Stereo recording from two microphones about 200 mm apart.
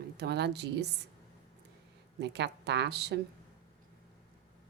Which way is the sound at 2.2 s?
60° right (ahead or behind).